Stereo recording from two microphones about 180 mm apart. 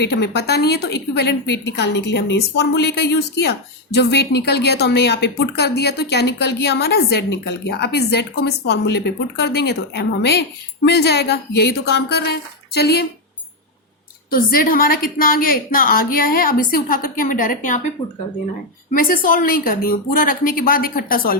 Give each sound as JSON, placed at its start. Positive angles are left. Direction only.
{"t": 0.0, "sound": "a woman's voice", "side_deg": 65}
{"t": 14.3, "sound": "a woman's voice", "side_deg": 50}
{"t": 18.9, "sound": "a woman's voice", "side_deg": 50}